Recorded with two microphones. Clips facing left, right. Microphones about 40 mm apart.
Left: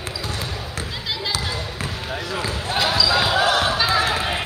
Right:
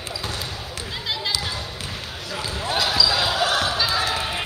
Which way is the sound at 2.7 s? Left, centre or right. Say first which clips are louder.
Left 2 dB; centre.